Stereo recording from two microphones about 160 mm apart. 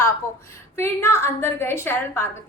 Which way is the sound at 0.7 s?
15° left (ahead or behind).